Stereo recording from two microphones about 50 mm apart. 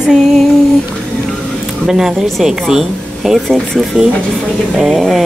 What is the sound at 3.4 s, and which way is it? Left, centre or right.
Speech, centre.